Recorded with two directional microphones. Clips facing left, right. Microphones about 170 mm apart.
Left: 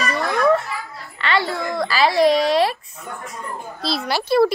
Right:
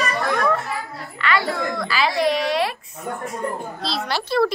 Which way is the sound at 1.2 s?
25° left (ahead or behind).